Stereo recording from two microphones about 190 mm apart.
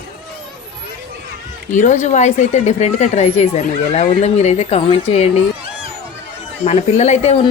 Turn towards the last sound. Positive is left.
turn(degrees=35)  # may be behind; listen again after turning